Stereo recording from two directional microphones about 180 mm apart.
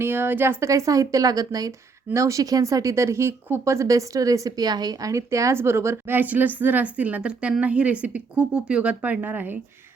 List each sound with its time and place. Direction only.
0.0 s speech: 10° right (ahead or behind)